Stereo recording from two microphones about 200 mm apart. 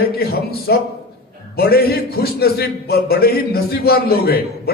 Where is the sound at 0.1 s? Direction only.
50° left (ahead or behind).